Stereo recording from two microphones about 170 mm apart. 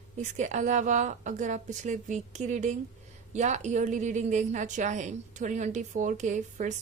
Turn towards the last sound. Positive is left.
turn(degrees=-45)  # may be behind; listen again after turning